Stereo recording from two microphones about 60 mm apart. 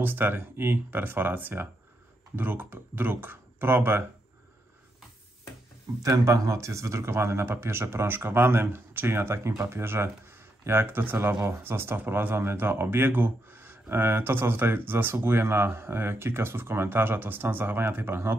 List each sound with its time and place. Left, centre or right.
0.0 s speech: right
6.0 s speech: right